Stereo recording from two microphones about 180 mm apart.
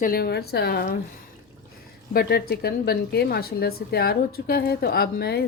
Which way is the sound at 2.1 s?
60° left (ahead or behind).